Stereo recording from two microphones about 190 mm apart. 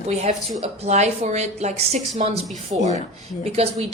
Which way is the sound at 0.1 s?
35° right (ahead or behind).